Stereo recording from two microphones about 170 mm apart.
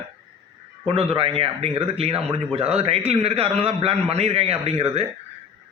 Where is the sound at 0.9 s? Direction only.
35° right (ahead or behind).